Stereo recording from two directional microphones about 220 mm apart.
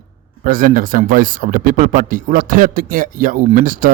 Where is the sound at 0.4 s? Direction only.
40° right (ahead or behind).